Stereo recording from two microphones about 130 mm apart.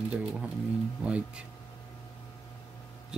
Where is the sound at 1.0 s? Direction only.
10° right (ahead or behind).